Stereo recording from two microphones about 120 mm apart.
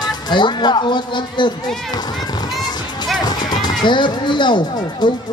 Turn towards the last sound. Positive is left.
turn(degrees=40)  # may be behind; listen again after turning